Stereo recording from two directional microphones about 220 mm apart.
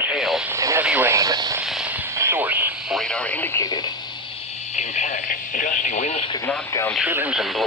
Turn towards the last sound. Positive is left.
turn(degrees=-5)  # may be behind; listen again after turning